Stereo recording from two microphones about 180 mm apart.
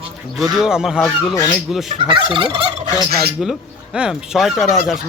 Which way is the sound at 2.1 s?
25° right (ahead or behind).